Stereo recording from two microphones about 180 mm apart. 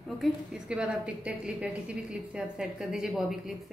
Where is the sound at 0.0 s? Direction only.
Centre (ahead or behind).